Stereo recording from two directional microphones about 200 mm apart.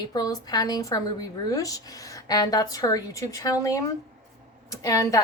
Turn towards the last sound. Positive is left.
turn(degrees=15)  # may be behind; listen again after turning